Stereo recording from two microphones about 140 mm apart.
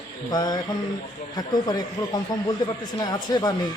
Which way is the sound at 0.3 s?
30° left (ahead or behind).